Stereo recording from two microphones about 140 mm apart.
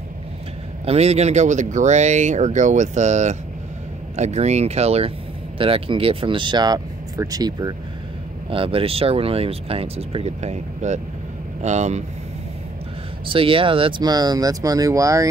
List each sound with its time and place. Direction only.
0.8 s speech: 50° right (ahead or behind); by 7.7 s 25° right (ahead or behind)
8.5 s speech: 40° right (ahead or behind)
13.3 s speech: 40° right (ahead or behind); by 15.2 s 25° right (ahead or behind)